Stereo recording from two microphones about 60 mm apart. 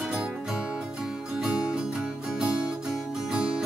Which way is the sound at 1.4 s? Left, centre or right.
Centre.